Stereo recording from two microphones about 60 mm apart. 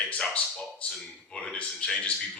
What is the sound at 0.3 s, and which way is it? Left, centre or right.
Speech, left.